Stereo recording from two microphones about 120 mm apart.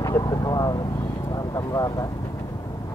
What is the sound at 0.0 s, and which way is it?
Vehicle, 30° left (ahead or behind).